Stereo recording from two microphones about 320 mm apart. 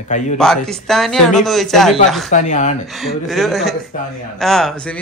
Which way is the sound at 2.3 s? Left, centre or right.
Left.